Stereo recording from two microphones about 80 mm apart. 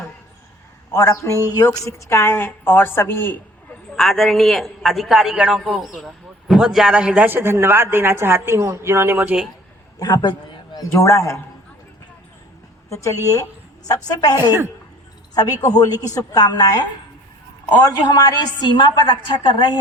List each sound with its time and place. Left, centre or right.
0.9 s a woman's voice: left
1.5 s a woman's voice: left
3.9 s a man's voice: centre
7.3 s a woman's voice: right
10.0 s a sound: left
10.9 s a woman's voice: left
12.9 s a woman's voice: left
15.6 s a woman's voice: left
17.8 s a woman's voice: left